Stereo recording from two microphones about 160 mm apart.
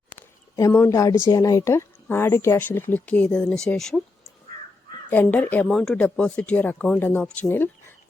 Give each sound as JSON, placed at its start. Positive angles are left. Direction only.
{"t": 0.1, "sound": "a sound", "side_deg": 15}
{"t": 1.2, "sound": "speech", "side_deg": 20}
{"t": 5.0, "sound": "speech", "side_deg": 15}